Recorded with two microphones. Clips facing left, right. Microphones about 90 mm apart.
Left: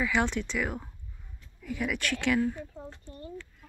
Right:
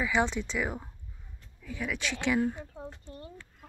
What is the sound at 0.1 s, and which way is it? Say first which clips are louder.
Speech: even; centre (ahead or behind).